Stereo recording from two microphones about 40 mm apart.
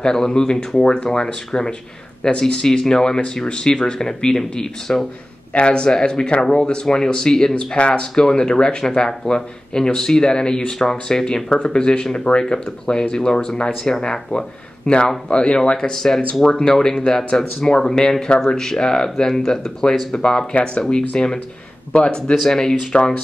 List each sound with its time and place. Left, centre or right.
0.0 s a man's voice: centre
5.5 s a man's voice: left
7.5 s a man's voice: left
22.3 s a man's voice: centre